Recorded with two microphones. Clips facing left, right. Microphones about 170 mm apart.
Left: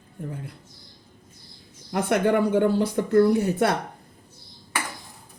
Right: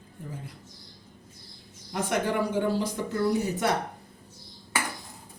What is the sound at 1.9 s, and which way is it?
Speech, 60° left (ahead or behind).